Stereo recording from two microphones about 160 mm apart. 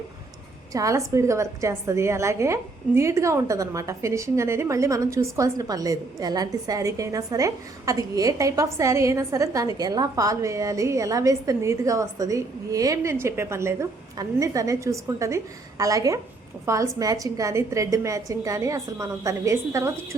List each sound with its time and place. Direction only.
0.7 s a woman's voice: 20° right (ahead or behind)